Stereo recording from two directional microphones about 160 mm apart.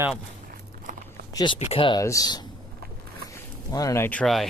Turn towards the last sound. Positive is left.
turn(degrees=5)  # may be behind; listen again after turning